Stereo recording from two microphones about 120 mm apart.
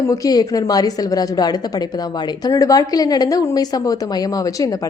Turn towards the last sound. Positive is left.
turn(degrees=30)  # may be behind; listen again after turning